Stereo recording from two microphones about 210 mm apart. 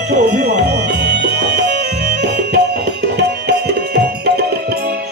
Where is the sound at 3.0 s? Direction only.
55° right (ahead or behind).